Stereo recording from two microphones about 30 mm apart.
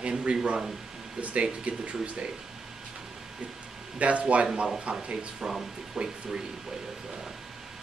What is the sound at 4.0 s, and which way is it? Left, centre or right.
Speech, right.